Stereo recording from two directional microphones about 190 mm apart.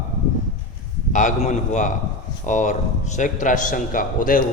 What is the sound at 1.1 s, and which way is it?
A man's voice, 40° left (ahead or behind).